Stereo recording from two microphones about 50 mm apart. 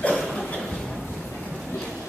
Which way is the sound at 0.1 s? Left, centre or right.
Centre.